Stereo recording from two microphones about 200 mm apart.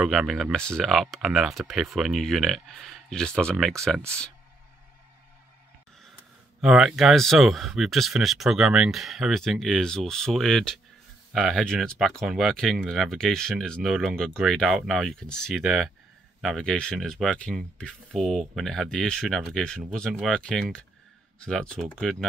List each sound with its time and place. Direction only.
0.0 s speech: centre (ahead or behind)
6.6 s speech: centre (ahead or behind)